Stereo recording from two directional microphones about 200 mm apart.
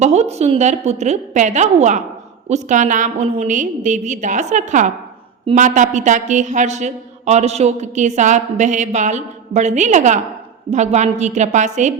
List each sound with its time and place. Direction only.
0.0 s a woman's voice: 35° right (ahead or behind)